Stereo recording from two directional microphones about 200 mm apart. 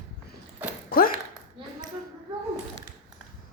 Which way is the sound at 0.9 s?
45° left (ahead or behind).